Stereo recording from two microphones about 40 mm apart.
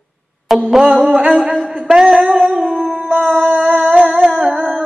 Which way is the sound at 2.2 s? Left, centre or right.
Right.